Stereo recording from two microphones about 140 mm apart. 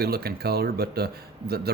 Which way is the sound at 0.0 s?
90° right.